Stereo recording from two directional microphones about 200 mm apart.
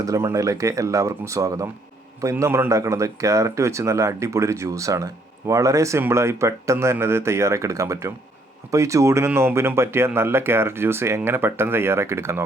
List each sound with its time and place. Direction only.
0.0 s speech: 15° right (ahead or behind)